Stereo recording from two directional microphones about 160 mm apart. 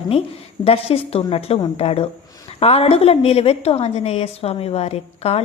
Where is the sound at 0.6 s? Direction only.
35° left (ahead or behind).